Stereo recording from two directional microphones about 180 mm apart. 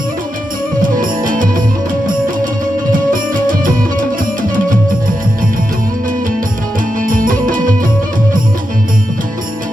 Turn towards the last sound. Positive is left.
turn(degrees=-50)  # may be behind; listen again after turning